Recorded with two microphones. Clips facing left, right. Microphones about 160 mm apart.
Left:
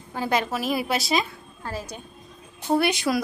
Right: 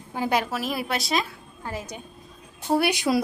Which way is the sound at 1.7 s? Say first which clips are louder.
Even; 20° right (ahead or behind).